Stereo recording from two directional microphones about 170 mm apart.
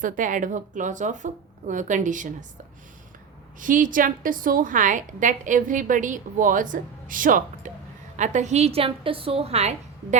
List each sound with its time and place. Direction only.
0.0 s a woman's voice: 50° right (ahead or behind)
3.6 s a woman's voice: 50° right (ahead or behind)